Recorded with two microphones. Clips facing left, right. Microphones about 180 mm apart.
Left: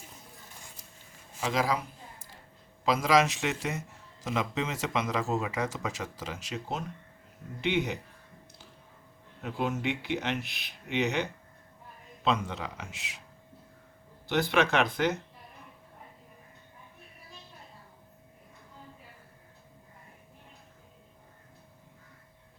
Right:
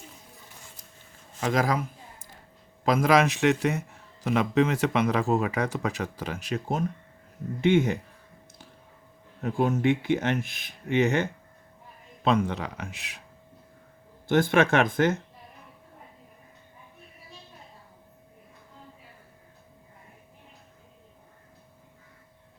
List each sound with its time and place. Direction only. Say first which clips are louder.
1.4 s speech: right 4 dB; 50° right (ahead or behind)
2.8 s a man's voice: right 3 dB; 55° right (ahead or behind)
9.4 s a man's voice: right 7 dB; 45° right (ahead or behind)
14.3 s speech: right 5 dB; 50° right (ahead or behind)